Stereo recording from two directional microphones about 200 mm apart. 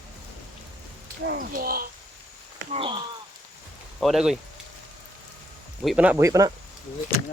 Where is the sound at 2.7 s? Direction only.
25° right (ahead or behind).